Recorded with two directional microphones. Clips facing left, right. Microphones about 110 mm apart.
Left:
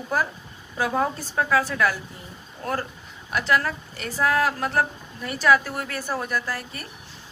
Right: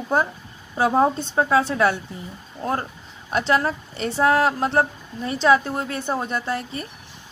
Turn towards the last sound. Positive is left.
turn(degrees=-25)  # may be behind; listen again after turning